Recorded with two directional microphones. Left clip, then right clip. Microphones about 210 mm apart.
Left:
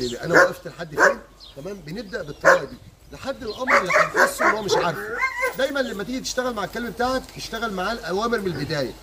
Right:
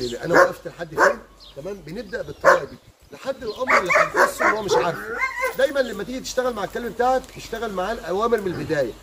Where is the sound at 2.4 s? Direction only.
50° right (ahead or behind).